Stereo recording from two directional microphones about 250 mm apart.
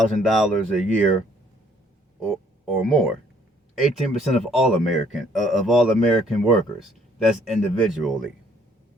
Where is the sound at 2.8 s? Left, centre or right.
Centre.